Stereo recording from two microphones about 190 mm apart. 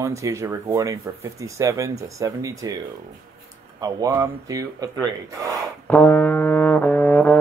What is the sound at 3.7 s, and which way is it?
Speech, 20° right (ahead or behind).